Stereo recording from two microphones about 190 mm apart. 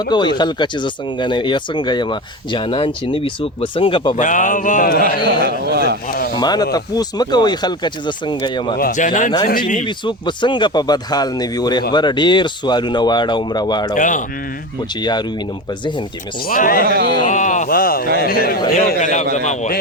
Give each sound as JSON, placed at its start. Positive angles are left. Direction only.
{"t": 0.0, "sound": "speech", "side_deg": 25}
{"t": 4.1, "sound": "mantra", "side_deg": 40}
{"t": 5.3, "sound": "a man's voice", "side_deg": -60}
{"t": 6.1, "sound": "a sound", "side_deg": 50}
{"t": 6.3, "sound": "speech", "side_deg": 20}
{"t": 8.8, "sound": "mantra", "side_deg": 40}
{"t": 9.5, "sound": "speech", "side_deg": 45}
{"t": 9.8, "sound": "speech", "side_deg": 25}
{"t": 13.9, "sound": "mantra", "side_deg": 40}
{"t": 15.0, "sound": "speech", "side_deg": 20}
{"t": 16.5, "sound": "speech", "side_deg": 50}
{"t": 16.9, "sound": "a man's voice", "side_deg": -55}
{"t": 17.2, "sound": "speech", "side_deg": 40}
{"t": 18.9, "sound": "mantra", "side_deg": 40}